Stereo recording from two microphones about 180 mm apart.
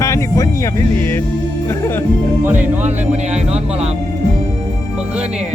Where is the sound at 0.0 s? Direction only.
15° left (ahead or behind).